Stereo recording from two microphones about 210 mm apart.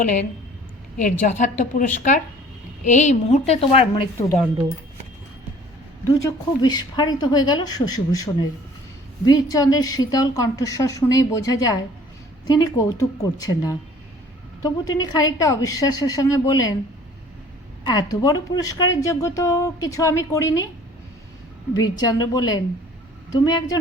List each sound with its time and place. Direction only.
1.2 s a woman's voice: 35° left (ahead or behind)
4.2 s a woman's voice: 15° left (ahead or behind)
6.6 s a woman's voice: 20° left (ahead or behind)
17.8 s a woman's voice: 20° left (ahead or behind)
21.8 s a woman's voice: 20° left (ahead or behind)